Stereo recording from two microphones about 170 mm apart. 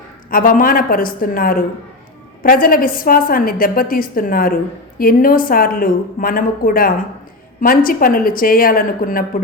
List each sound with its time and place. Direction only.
0.3 s a woman's voice: 55° left (ahead or behind)